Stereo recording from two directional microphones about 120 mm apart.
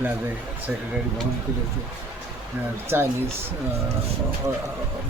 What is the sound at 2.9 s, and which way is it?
Speech, 20° right (ahead or behind).